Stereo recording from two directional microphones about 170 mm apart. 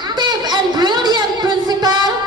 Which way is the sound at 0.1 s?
25° right (ahead or behind).